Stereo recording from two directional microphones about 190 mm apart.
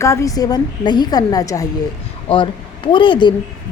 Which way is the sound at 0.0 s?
15° left (ahead or behind).